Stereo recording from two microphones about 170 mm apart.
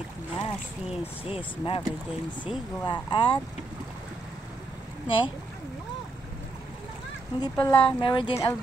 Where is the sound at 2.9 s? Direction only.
25° left (ahead or behind).